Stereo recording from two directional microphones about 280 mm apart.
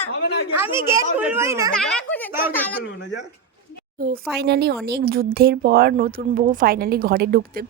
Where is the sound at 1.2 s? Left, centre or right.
Centre.